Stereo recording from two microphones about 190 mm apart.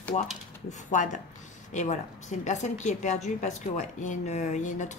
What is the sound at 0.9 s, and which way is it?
A woman's voice, 40° left (ahead or behind).